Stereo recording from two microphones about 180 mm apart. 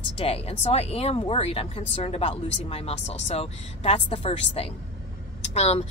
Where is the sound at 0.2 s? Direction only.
35° left (ahead or behind).